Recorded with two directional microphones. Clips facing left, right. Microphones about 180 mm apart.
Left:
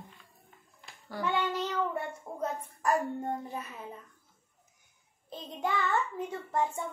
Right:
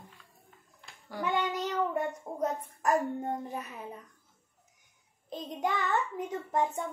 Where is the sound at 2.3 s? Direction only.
20° right (ahead or behind).